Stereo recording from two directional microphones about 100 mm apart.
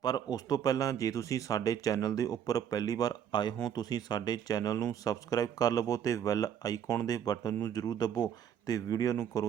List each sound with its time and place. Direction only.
0.0 s speech: 40° left (ahead or behind)